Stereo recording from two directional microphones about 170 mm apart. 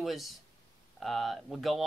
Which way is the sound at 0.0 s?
Centre (ahead or behind).